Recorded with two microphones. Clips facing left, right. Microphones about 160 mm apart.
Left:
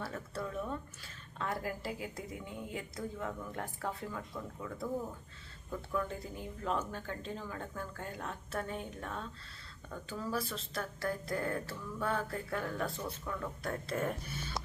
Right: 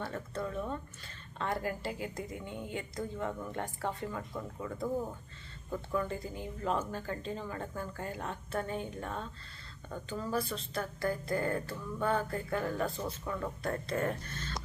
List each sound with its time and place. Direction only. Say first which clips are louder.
0.0 s speech: right 3 dB; 5° left (ahead or behind)